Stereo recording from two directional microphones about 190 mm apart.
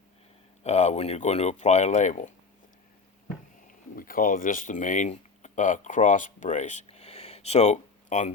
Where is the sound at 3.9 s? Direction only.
50° left (ahead or behind).